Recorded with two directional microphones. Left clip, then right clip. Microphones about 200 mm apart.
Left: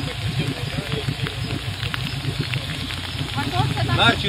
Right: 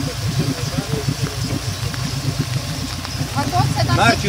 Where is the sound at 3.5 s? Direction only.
45° right (ahead or behind).